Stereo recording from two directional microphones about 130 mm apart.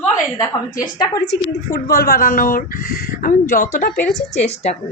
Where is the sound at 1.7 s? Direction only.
20° left (ahead or behind).